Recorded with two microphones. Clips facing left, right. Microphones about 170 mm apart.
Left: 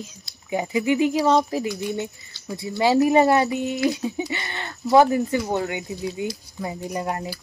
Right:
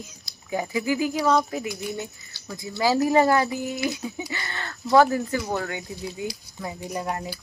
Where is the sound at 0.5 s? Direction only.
20° left (ahead or behind).